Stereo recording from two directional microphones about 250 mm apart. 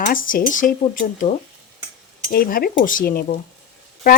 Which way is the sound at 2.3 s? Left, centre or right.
Left.